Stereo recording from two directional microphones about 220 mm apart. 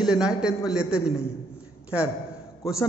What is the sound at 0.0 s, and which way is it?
A man's voice, 5° right (ahead or behind).